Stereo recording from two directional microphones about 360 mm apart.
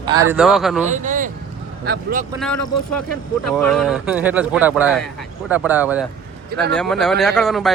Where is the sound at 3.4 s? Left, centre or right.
Centre.